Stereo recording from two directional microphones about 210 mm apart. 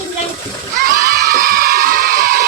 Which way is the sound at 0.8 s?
45° right (ahead or behind).